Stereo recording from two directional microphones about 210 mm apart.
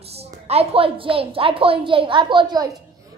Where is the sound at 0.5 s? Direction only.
30° right (ahead or behind).